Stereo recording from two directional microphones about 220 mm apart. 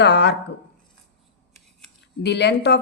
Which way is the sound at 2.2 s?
50° left (ahead or behind).